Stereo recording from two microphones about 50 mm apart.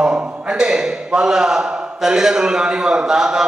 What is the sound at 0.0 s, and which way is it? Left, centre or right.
A man's voice, centre.